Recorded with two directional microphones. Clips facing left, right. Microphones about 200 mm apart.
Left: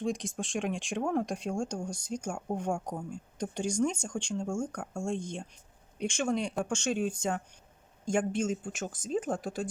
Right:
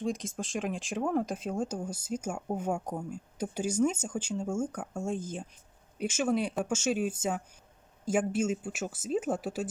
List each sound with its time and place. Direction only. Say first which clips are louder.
0.0 s speech: even; centre (ahead or behind)